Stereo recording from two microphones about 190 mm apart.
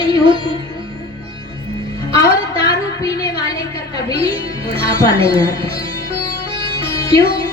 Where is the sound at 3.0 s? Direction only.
20° left (ahead or behind).